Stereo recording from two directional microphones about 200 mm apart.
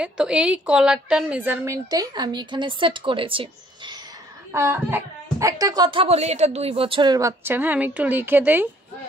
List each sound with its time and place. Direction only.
0.0 s speech: 5° right (ahead or behind); by 4.0 s 25° right (ahead or behind)
4.5 s speech: 10° right (ahead or behind)